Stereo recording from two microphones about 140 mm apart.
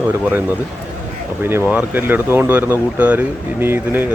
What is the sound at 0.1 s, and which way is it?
Speech, 15° right (ahead or behind).